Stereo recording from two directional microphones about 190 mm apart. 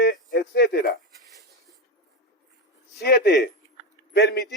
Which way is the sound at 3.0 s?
60° left (ahead or behind).